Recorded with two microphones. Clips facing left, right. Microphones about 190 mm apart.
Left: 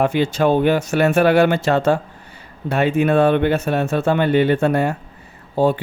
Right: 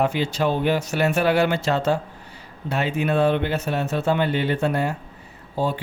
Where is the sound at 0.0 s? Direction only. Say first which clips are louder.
Left 5 dB; 55° left (ahead or behind).